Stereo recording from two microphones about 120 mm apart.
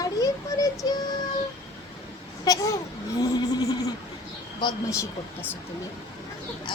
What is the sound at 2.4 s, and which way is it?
Speech, 30° left (ahead or behind).